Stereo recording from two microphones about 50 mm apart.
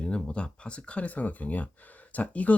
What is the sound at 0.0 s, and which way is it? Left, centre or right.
Speech, left.